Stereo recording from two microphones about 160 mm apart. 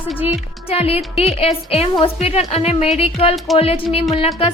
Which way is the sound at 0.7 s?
40° left (ahead or behind).